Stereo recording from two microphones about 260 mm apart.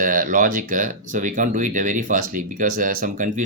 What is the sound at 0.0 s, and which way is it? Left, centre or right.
Speech, right.